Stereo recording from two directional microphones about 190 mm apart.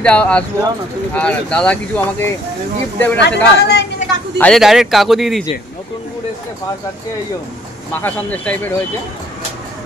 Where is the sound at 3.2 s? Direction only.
60° left (ahead or behind).